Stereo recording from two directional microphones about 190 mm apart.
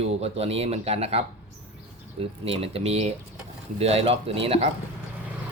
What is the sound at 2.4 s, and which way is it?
Speech, 30° right (ahead or behind).